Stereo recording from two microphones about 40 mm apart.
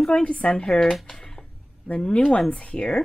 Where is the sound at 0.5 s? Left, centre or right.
Centre.